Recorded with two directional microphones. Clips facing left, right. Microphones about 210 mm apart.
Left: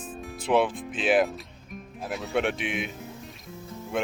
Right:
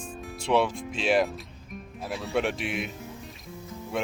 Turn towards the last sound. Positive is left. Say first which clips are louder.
# left 2 dB
turn(degrees=0)  # may be behind; listen again after turning